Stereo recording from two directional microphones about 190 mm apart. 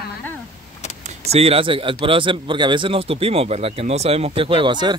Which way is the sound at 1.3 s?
30° right (ahead or behind).